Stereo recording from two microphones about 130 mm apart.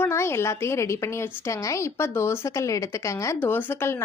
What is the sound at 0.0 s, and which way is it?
A woman's voice, 20° left (ahead or behind).